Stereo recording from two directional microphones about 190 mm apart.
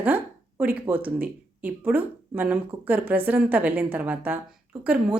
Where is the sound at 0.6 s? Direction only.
10° right (ahead or behind).